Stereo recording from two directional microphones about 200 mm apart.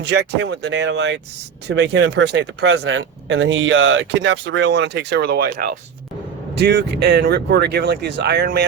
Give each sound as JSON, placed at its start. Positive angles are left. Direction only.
{"t": 0.0, "sound": "speech", "side_deg": -60}